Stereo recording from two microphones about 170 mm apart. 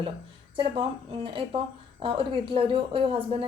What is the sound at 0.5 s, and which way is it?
A woman's voice, 30° right (ahead or behind).